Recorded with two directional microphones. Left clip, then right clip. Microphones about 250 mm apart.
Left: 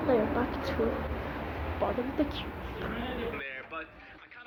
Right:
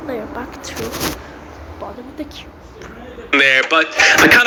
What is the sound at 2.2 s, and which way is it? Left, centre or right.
Speech, centre.